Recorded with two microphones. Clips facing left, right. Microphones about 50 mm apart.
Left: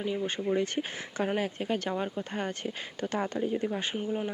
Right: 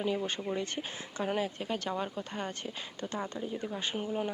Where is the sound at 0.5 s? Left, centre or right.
Left.